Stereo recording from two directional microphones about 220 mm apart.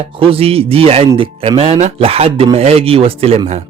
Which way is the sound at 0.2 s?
25° right (ahead or behind).